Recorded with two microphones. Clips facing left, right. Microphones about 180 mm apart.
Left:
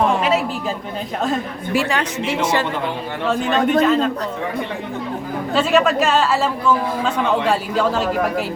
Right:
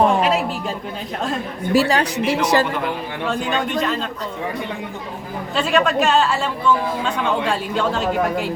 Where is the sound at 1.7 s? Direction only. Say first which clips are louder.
Right 3 dB; 35° right (ahead or behind).